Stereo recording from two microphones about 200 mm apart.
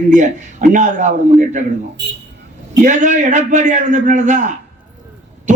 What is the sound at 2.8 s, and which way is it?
A man's voice, 40° right (ahead or behind).